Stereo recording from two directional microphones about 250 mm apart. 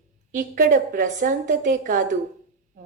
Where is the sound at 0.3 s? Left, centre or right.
Right.